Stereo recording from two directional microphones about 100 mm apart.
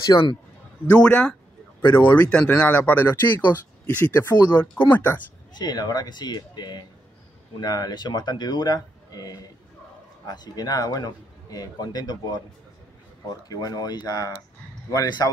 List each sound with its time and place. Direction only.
0.0 s speech: 35° left (ahead or behind)
1.0 s speech: 10° left (ahead or behind)
5.5 s speech: 45° left (ahead or behind)